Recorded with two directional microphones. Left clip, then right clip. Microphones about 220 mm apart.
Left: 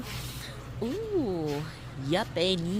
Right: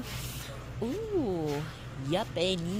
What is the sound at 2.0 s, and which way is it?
Speech, 15° left (ahead or behind).